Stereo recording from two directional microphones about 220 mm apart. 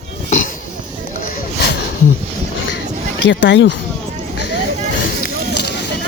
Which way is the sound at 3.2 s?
55° left (ahead or behind).